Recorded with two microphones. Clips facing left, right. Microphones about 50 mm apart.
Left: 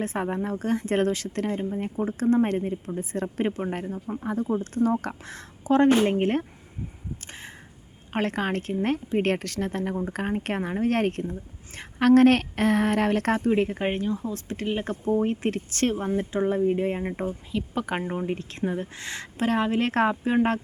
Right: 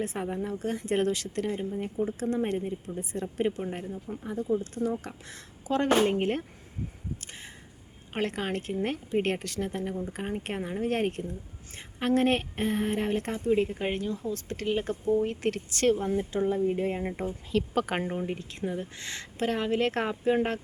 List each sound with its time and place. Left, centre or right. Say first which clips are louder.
0.0 s speech: left 4 dB; left
2.6 s speech: left 4 dB; left
3.4 s speech: left 1 dB; left
3.7 s speech: left 5 dB; left
7.2 s a sound: left 3 dB; left
8.1 s a woman's voice: left 4 dB; left
12.4 s speech: left 6 dB; left
13.5 s speech: left 2 dB; left
14.8 s speech: left 5 dB; left; by 17.3 s centre
17.5 s speech: right 4 dB; centre
18.1 s speech: left 3 dB; centre
18.6 s speech: left 4 dB; left